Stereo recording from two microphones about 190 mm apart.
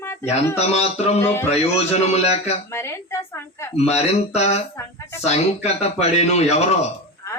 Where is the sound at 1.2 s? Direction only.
15° left (ahead or behind).